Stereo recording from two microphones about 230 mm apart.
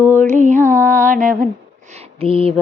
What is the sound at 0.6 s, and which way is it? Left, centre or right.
Music, centre.